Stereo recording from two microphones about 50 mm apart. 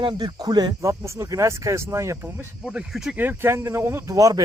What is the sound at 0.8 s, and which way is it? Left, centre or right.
Speech, right.